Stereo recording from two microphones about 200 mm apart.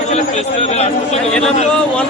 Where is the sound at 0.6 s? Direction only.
30° left (ahead or behind).